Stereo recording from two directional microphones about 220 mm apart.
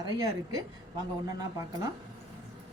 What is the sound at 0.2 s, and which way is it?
A woman's voice, 15° right (ahead or behind).